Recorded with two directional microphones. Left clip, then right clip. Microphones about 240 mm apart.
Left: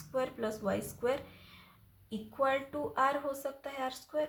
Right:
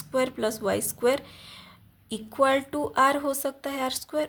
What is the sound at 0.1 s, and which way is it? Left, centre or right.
A woman's voice, right.